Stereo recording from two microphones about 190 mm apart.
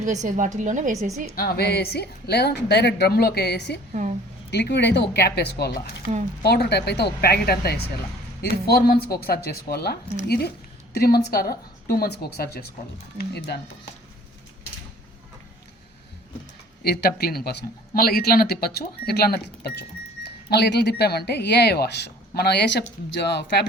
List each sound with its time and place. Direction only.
0.0 s a woman's voice: 40° right (ahead or behind)
1.4 s speech: 55° left (ahead or behind)
4.0 s a woman's voice: 40° right (ahead or behind)
4.5 s speech: 65° left (ahead or behind)
16.8 s speech: 55° left (ahead or behind)